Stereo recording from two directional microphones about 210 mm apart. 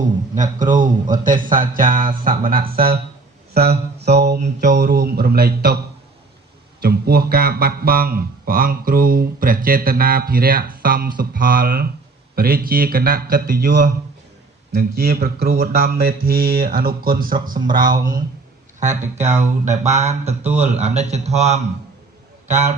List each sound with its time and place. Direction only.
0.3 s speech: 35° right (ahead or behind)
3.5 s speech: 50° right (ahead or behind)
6.8 s speech: 45° right (ahead or behind)
17.7 s speech: 20° right (ahead or behind)
18.8 s speech: 35° right (ahead or behind)
20.4 s a man's voice: 5° right (ahead or behind)
20.7 s a man's voice: 35° right (ahead or behind)